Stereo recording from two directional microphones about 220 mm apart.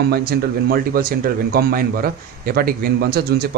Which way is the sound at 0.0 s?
45° right (ahead or behind).